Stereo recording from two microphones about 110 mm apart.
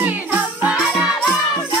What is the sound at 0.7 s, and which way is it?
Music, 5° right (ahead or behind).